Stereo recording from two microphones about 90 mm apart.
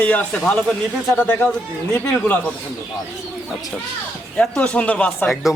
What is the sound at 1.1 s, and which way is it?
Speech, 20° left (ahead or behind).